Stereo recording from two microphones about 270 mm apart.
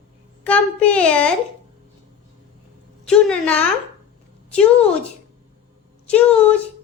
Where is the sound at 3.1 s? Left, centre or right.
Centre.